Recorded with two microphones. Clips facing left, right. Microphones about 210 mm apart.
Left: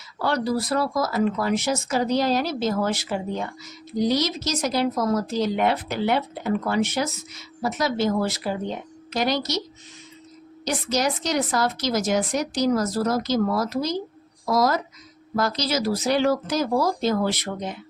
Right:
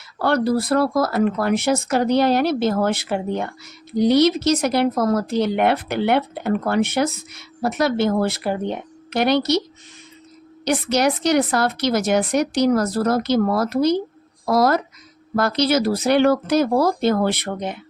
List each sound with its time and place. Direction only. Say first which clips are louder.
0.2 s speech: right 5 dB; 60° right (ahead or behind)
10.7 s speech: right 5 dB; 65° right (ahead or behind)